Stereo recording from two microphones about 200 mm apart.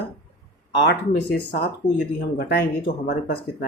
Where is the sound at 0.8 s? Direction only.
55° left (ahead or behind).